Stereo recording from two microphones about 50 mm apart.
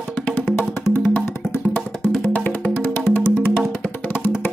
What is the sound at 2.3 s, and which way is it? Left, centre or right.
Music, left.